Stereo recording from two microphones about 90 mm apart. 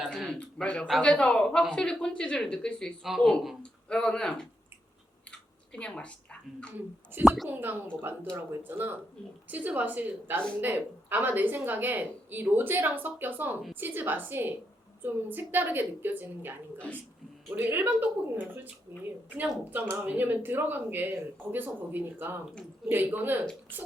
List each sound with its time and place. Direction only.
0.1 s a man's voice: 5° left (ahead or behind)
3.0 s speech: centre (ahead or behind)
3.6 s a woman's voice: 10° left (ahead or behind)
5.7 s a woman's voice: 10° left (ahead or behind)
6.7 s a woman's voice: 20° right (ahead or behind)
16.7 s a woman's voice: 15° left (ahead or behind)
17.5 s a woman's voice: 20° right (ahead or behind)